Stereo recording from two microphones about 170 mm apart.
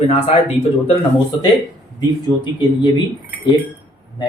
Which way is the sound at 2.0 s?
25° left (ahead or behind).